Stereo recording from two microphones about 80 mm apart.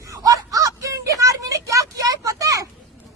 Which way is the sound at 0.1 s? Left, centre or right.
Right.